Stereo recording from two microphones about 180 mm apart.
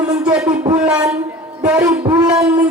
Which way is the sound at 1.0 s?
5° right (ahead or behind).